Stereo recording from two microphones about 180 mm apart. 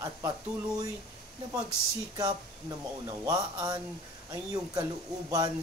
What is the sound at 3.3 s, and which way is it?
Speech, 20° right (ahead or behind).